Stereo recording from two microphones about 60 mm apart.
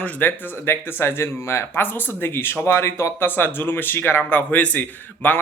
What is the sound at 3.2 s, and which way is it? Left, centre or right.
A man's voice, left.